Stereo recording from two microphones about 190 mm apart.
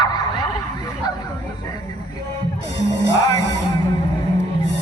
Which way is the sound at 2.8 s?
70° left (ahead or behind).